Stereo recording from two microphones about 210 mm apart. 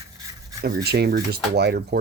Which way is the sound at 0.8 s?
50° right (ahead or behind).